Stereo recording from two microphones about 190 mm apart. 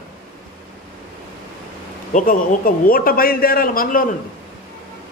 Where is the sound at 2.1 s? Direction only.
45° left (ahead or behind).